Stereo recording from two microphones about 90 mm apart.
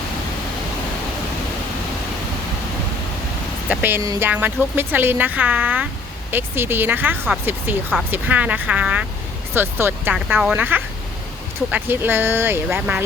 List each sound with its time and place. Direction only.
3.7 s speech: 20° right (ahead or behind)
9.6 s speech: 25° right (ahead or behind)